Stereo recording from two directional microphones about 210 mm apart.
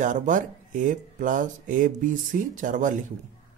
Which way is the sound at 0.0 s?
35° right (ahead or behind).